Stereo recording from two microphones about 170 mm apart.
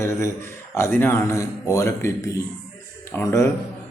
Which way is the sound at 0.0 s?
15° left (ahead or behind).